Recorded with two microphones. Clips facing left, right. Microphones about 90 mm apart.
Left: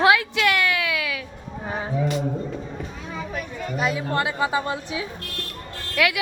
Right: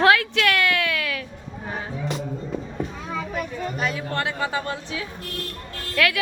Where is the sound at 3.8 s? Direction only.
15° left (ahead or behind).